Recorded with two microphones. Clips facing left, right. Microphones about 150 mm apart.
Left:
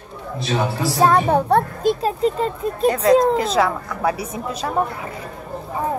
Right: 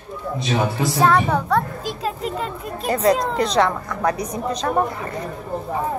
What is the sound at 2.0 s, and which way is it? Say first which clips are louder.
Speech: left 6 dB; 35° left (ahead or behind).